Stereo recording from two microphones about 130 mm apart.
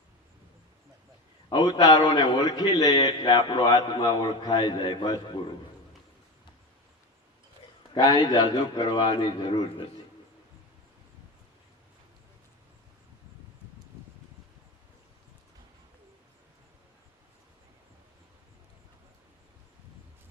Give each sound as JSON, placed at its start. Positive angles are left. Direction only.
{"t": 1.5, "sound": "a man's voice", "side_deg": 35}
{"t": 7.9, "sound": "a man's voice", "side_deg": 35}